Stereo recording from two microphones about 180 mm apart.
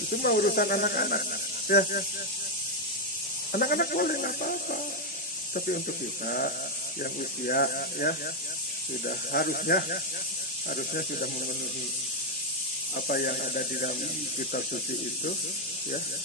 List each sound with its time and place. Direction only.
0.1 s speech: 55° left (ahead or behind)
3.5 s speech: 55° left (ahead or behind)
13.1 s speech: 55° left (ahead or behind)